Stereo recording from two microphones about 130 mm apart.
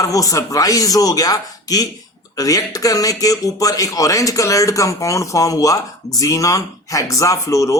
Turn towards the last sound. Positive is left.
turn(degrees=25)  # may be behind; listen again after turning